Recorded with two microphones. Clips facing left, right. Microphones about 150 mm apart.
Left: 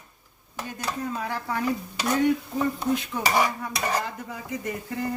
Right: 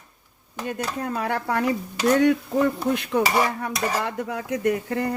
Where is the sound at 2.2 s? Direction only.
70° right (ahead or behind).